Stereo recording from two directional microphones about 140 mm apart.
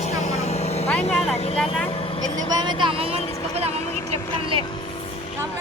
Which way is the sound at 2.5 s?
35° right (ahead or behind).